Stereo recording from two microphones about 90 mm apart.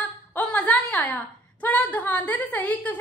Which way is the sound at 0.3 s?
20° left (ahead or behind).